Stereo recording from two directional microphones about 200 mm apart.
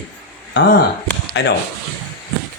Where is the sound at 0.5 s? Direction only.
60° left (ahead or behind).